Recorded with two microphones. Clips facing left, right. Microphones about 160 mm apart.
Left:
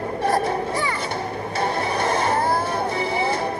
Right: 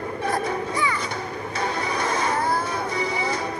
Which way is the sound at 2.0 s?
30° left (ahead or behind).